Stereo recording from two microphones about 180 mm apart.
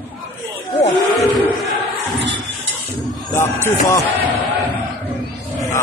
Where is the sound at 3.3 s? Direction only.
15° left (ahead or behind).